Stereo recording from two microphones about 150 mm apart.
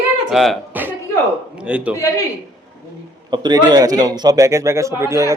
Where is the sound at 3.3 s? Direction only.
30° right (ahead or behind).